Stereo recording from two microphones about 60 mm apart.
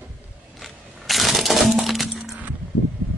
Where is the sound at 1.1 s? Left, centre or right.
Centre.